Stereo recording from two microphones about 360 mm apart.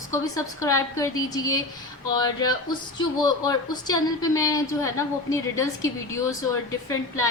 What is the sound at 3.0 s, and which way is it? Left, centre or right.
A woman's voice, centre.